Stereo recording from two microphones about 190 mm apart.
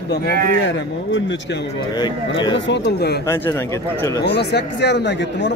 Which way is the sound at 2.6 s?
65° left (ahead or behind).